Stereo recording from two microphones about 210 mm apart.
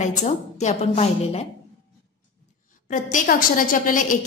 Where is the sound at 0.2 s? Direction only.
35° left (ahead or behind).